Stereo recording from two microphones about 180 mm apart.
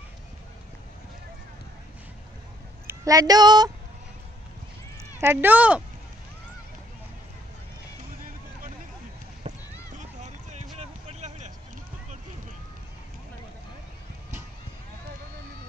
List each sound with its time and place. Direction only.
2.9 s speech: 20° right (ahead or behind)
5.2 s speech: 10° right (ahead or behind)
9.5 s a sound: 40° right (ahead or behind)